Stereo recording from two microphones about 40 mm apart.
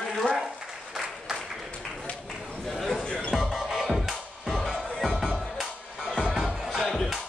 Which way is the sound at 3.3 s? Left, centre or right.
Centre.